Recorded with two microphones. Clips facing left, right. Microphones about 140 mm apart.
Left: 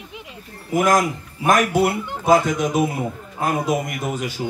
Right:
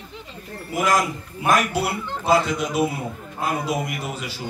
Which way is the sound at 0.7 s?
50° left (ahead or behind).